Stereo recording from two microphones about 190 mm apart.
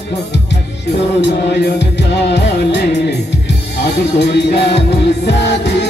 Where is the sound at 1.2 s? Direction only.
65° left (ahead or behind).